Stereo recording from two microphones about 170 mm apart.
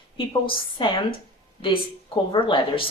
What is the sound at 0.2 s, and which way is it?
Speech, 30° left (ahead or behind).